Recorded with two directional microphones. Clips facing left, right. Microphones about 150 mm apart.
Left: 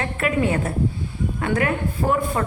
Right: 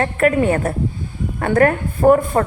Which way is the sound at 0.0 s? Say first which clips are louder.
Right 6 dB; 50° right (ahead or behind).